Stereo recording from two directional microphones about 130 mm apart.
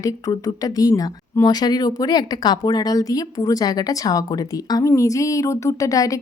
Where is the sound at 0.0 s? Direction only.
30° left (ahead or behind).